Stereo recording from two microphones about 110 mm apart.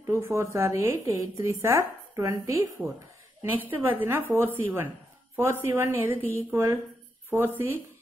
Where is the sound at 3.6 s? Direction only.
15° right (ahead or behind).